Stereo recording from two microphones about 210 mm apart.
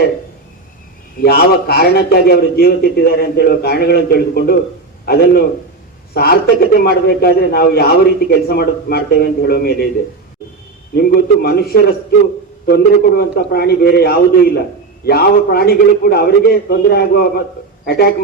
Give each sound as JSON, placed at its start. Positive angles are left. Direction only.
{"t": 1.2, "sound": "a man's voice", "side_deg": 50}
{"t": 10.9, "sound": "a man's voice", "side_deg": 45}